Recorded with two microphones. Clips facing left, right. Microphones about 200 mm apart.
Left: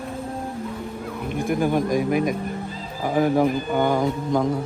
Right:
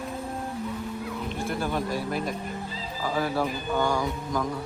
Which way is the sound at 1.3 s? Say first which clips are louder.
Left 9 dB; 15° left (ahead or behind).